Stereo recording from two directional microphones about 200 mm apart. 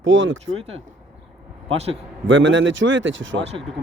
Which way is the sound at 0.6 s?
30° right (ahead or behind).